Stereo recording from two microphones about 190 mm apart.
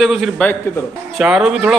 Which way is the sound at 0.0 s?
Centre (ahead or behind).